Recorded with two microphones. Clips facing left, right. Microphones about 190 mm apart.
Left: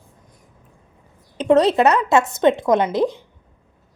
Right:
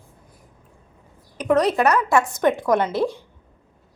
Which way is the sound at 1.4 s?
25° left (ahead or behind).